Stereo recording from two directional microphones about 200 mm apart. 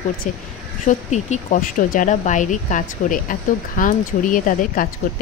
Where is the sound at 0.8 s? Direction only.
35° left (ahead or behind).